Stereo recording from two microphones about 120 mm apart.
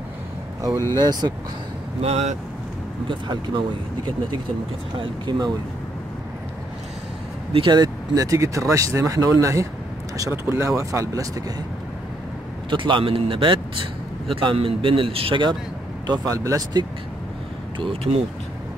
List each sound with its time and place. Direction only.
0.6 s speech: 30° right (ahead or behind)
2.0 s speech: 65° right (ahead or behind)
3.1 s speech: 40° right (ahead or behind)
4.9 s a man's voice: 45° right (ahead or behind)
7.5 s speech: 40° right (ahead or behind)
12.6 s a man's voice: 45° right (ahead or behind)
16.1 s speech: 30° right (ahead or behind)